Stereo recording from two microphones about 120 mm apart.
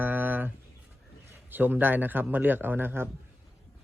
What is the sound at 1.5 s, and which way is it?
A man's voice, 15° right (ahead or behind).